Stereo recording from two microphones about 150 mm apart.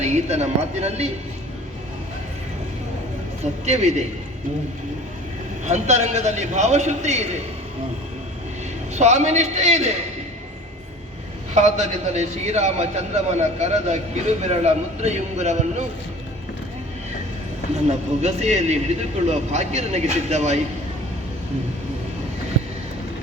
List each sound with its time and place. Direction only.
0.0 s a man's voice: 45° right (ahead or behind)
3.7 s a man's voice: 50° right (ahead or behind)
5.6 s a man's voice: 50° right (ahead or behind)
9.0 s a man's voice: 50° right (ahead or behind)
11.5 s a man's voice: 50° right (ahead or behind)
18.2 s a man's voice: 50° right (ahead or behind)